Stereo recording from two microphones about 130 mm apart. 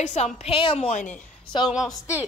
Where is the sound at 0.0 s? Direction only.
65° left (ahead or behind).